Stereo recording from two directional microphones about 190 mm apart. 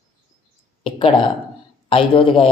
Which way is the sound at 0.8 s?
30° left (ahead or behind).